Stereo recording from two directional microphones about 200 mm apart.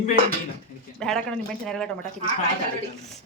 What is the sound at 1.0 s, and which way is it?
Speech, 5° left (ahead or behind).